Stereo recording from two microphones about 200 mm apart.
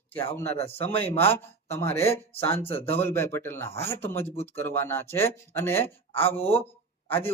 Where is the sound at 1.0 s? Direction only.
10° left (ahead or behind).